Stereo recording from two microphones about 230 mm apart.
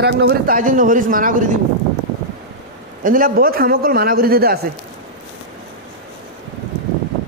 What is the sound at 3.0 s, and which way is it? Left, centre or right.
A man's voice, right.